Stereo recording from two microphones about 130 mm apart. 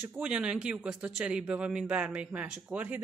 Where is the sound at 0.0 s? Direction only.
10° right (ahead or behind).